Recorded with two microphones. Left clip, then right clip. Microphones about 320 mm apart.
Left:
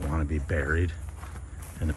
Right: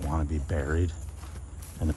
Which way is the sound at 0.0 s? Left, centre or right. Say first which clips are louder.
Even; centre.